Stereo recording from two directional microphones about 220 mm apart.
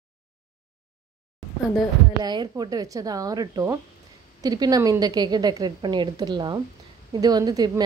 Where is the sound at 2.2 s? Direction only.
20° right (ahead or behind).